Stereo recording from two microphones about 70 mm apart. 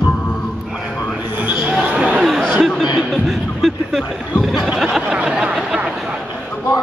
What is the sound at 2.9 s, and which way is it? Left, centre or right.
Speech, centre.